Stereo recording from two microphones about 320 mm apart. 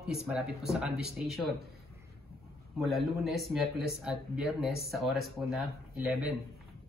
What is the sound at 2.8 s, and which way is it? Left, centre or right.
A man's voice, centre.